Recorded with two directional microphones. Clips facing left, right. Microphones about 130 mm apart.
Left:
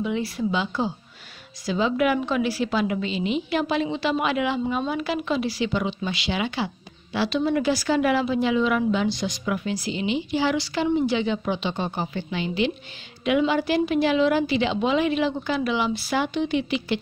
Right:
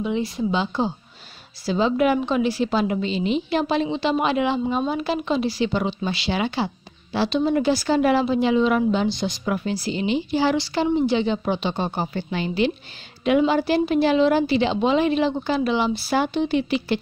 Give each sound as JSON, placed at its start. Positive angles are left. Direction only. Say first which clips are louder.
{"t": 0.0, "sound": "a woman's voice", "louder": "right 2 dB", "side_deg": -25}